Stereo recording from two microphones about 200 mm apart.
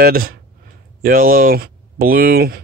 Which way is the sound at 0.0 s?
45° right (ahead or behind).